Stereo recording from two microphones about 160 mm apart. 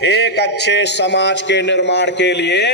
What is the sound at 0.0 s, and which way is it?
A man's voice, 90° left.